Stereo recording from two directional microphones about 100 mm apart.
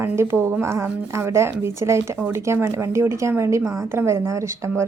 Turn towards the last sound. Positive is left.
turn(degrees=-30)  # may be behind; listen again after turning